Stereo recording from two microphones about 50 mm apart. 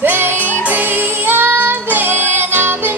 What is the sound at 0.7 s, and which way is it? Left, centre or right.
Child singing, right.